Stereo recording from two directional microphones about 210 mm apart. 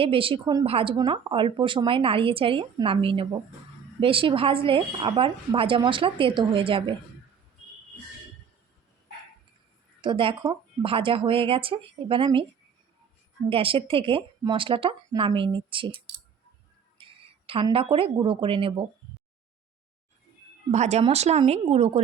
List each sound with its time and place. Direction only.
0.0 s speech: 25° right (ahead or behind)
10.0 s speech: 25° right (ahead or behind)
13.5 s speech: 25° right (ahead or behind)
17.0 s speech: 25° right (ahead or behind)
20.7 s speech: 30° right (ahead or behind)